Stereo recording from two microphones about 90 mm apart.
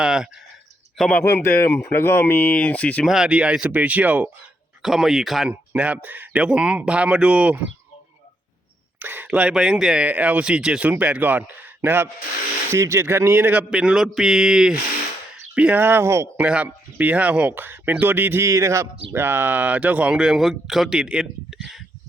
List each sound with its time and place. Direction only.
0.0 s speech: 5° right (ahead or behind)
1.2 s a man's voice: 30° left (ahead or behind)
1.5 s speech: 15° left (ahead or behind)
3.1 s speech: 10° right (ahead or behind)
4.8 s speech: 5° right (ahead or behind)
5.5 s speech: 15° right (ahead or behind)
9.0 s speech: 20° right (ahead or behind)
15.8 s speech: 25° right (ahead or behind)
16.4 s speech: 15° right (ahead or behind)
18.4 s speech: 35° right (ahead or behind); by 21.8 s 5° right (ahead or behind)